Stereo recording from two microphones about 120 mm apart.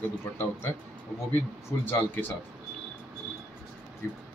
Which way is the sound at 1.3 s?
20° left (ahead or behind).